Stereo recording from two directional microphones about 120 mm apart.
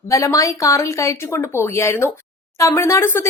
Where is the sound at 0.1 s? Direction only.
25° left (ahead or behind).